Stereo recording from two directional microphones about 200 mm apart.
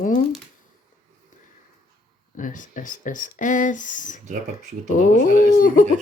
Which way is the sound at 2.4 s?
40° left (ahead or behind).